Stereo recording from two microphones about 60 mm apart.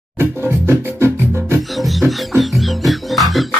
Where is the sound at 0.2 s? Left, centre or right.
Right.